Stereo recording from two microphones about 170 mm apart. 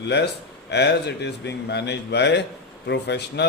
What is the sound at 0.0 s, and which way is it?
A man's voice, 90° left.